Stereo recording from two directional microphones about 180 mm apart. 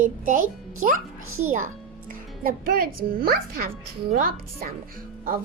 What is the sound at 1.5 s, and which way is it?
A child's voice, 45° right (ahead or behind).